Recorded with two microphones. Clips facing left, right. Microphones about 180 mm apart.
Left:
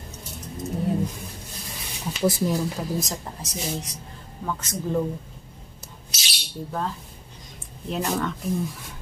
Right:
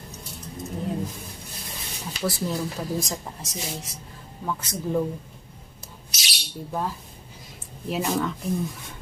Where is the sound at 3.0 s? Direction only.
Centre (ahead or behind).